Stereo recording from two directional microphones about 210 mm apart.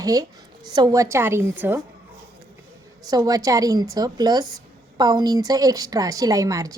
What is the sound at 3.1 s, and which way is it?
A woman's voice, 20° right (ahead or behind).